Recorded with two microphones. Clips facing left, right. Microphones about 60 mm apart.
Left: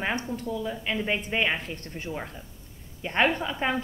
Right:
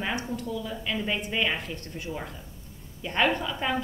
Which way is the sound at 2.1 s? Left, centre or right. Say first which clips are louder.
Left 1 dB; centre.